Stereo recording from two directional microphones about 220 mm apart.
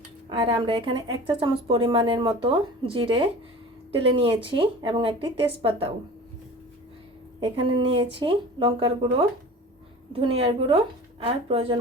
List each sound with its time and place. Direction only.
0.3 s speech: 25° right (ahead or behind)
7.3 s speech: 20° right (ahead or behind)